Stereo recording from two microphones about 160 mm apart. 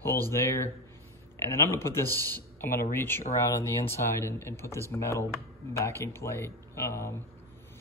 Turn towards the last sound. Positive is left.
turn(degrees=15)  # may be behind; listen again after turning